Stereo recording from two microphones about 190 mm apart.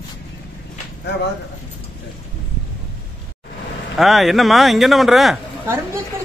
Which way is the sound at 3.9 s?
Centre (ahead or behind).